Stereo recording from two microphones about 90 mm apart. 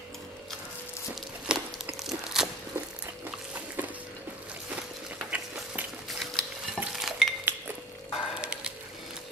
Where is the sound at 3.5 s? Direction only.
15° right (ahead or behind).